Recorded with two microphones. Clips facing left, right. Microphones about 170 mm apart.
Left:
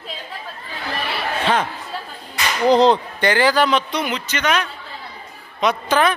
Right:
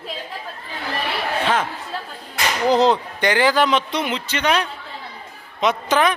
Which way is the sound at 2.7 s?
5° right (ahead or behind).